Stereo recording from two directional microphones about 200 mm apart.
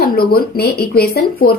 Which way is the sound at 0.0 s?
50° left (ahead or behind).